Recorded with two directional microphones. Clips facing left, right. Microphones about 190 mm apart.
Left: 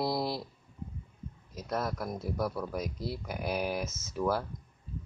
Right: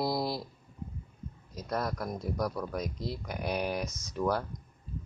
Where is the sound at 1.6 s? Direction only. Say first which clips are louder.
Even; 5° left (ahead or behind).